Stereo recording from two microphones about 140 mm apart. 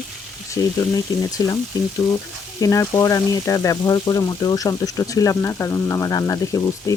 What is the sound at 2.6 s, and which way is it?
Speech, 25° left (ahead or behind).